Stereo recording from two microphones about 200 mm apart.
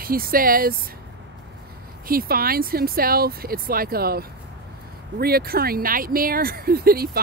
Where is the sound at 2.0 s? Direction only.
45° right (ahead or behind).